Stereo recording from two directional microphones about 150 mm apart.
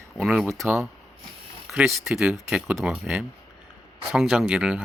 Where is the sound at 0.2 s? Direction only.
Centre (ahead or behind).